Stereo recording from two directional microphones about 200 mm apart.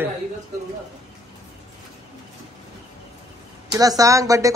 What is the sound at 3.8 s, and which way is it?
Speech, 15° right (ahead or behind).